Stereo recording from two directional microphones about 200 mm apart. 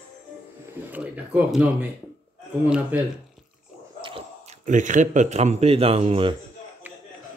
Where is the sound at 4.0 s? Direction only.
25° right (ahead or behind).